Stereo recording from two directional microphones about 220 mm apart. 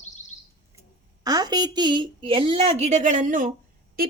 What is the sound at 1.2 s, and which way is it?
A woman's voice, 20° right (ahead or behind).